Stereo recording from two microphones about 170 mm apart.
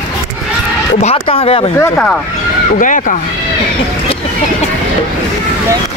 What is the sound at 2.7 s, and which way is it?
Speech, 50° left (ahead or behind).